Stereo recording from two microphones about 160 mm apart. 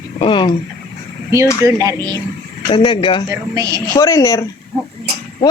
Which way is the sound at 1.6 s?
20° right (ahead or behind).